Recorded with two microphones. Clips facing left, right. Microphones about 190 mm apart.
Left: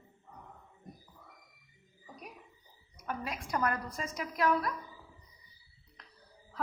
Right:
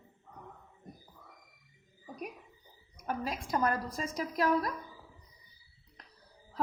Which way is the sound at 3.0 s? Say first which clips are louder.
Right 3 dB; 40° right (ahead or behind).